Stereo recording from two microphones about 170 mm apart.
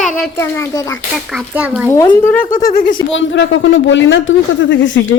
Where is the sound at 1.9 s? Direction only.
15° left (ahead or behind).